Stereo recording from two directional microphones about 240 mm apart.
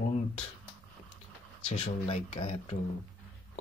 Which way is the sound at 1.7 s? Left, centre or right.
Left.